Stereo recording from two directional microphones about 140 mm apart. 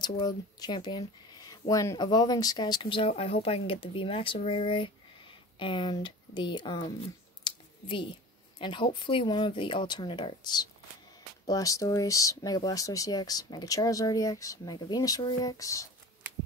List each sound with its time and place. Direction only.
0.0 s speech: 30° left (ahead or behind)
7.4 s a sound: 35° left (ahead or behind)
8.5 s speech: 35° left (ahead or behind)